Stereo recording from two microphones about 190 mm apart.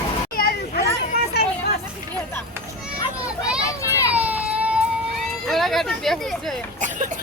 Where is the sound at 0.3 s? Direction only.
55° left (ahead or behind).